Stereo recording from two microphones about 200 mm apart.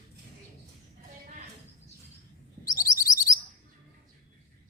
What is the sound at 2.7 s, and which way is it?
Bird, 15° left (ahead or behind).